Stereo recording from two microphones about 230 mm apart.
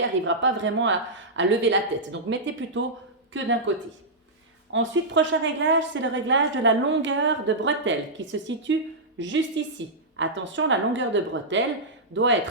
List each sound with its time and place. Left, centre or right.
0.0 s a woman's voice: right
4.7 s a woman's voice: right